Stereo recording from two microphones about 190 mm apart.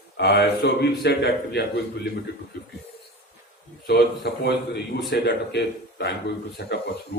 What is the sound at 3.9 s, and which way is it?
A man's voice, 60° left (ahead or behind).